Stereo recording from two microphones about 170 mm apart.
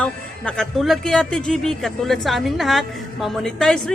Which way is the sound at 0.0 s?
5° left (ahead or behind).